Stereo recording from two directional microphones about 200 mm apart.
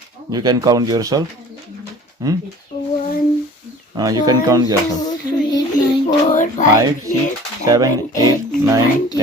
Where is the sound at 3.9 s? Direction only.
20° right (ahead or behind).